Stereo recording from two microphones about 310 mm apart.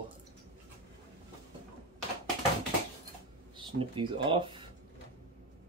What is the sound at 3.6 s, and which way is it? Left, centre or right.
Speech, centre.